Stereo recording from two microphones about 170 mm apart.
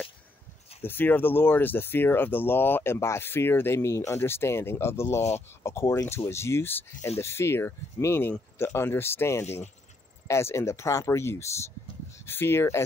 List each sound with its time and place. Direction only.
0.8 s speech: 10° left (ahead or behind)